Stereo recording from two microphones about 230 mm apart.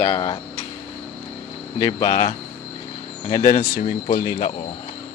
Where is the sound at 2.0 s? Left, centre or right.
Centre.